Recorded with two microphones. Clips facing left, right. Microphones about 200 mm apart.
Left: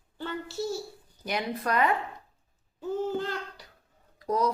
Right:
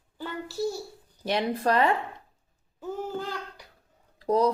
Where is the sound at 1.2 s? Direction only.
30° right (ahead or behind).